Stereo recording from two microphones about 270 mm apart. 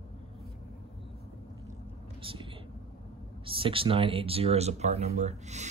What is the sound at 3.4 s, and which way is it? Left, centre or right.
Speech, centre.